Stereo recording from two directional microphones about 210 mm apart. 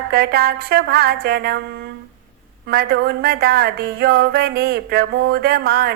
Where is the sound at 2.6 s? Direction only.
50° right (ahead or behind).